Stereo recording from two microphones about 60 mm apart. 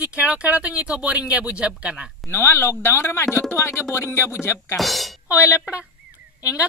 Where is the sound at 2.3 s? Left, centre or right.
Left.